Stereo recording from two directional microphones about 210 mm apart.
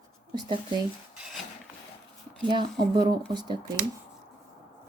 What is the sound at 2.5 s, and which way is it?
Speech, 20° right (ahead or behind).